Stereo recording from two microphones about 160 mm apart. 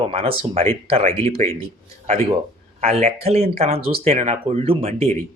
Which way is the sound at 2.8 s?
40° right (ahead or behind).